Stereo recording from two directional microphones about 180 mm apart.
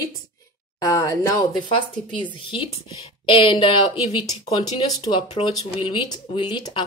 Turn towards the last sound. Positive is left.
turn(degrees=30)  # may be behind; listen again after turning